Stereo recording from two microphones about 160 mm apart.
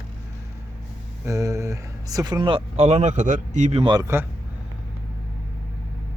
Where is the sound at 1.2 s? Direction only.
20° right (ahead or behind); by 3.9 s 45° right (ahead or behind).